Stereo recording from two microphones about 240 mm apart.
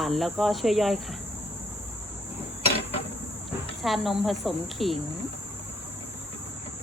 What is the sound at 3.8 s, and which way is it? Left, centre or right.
Speech, centre.